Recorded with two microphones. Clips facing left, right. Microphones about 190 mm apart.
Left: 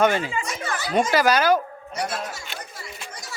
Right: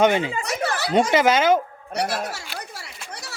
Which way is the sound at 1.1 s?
20° right (ahead or behind).